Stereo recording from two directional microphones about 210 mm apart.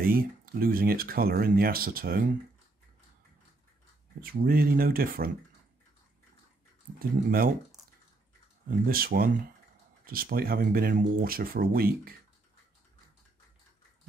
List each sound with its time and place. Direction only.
0.0 s speech: 45° right (ahead or behind)
4.2 s speech: 45° right (ahead or behind)
7.0 s speech: 45° right (ahead or behind)
8.6 s speech: 45° right (ahead or behind)